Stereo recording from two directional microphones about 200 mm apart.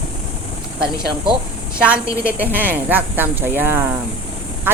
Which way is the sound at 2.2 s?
10° right (ahead or behind).